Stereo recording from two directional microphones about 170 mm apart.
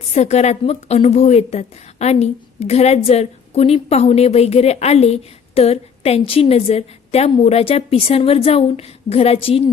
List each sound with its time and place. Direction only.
0.1 s a woman's voice: 40° left (ahead or behind)